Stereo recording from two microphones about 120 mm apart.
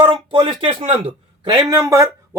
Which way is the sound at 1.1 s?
45° right (ahead or behind).